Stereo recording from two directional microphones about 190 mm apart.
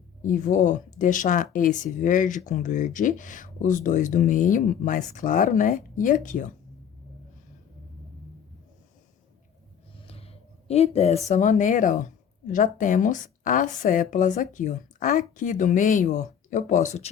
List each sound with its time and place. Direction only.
0.2 s speech: 40° left (ahead or behind)
10.1 s speech: 30° left (ahead or behind)